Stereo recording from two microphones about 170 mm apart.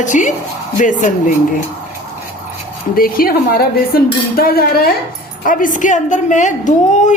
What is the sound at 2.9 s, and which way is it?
A woman's voice, 60° left (ahead or behind).